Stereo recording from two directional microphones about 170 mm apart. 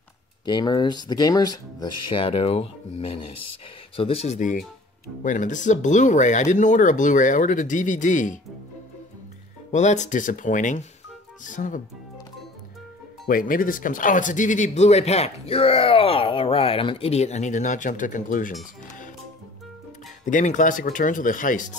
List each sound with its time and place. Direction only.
0.5 s speech: 25° left (ahead or behind); by 8.4 s 50° left (ahead or behind)
9.7 s speech: 45° left (ahead or behind)
13.3 s speech: 55° left (ahead or behind)
20.2 s speech: 50° left (ahead or behind)